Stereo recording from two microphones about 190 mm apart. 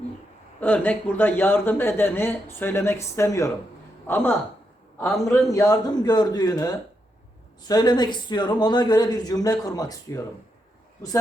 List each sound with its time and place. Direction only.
0.6 s a man's voice: 10° left (ahead or behind)
5.5 s a man's voice: 20° left (ahead or behind)